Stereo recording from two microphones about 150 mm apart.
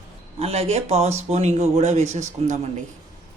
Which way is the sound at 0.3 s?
40° right (ahead or behind).